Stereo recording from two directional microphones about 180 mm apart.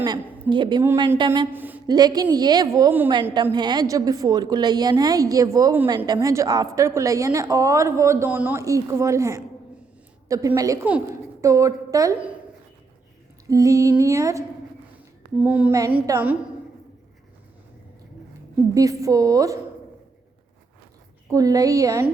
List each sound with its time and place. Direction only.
0.5 s a woman's voice: 25° right (ahead or behind)
0.8 s a woman's voice: 15° right (ahead or behind)
1.9 s a woman's voice: 20° right (ahead or behind)
13.5 s a woman's voice: 20° right (ahead or behind)
18.7 s a woman's voice: 20° right (ahead or behind)
21.2 s a woman's voice: 20° right (ahead or behind)